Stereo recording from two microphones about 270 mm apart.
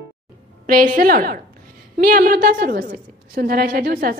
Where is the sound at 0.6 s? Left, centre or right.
Right.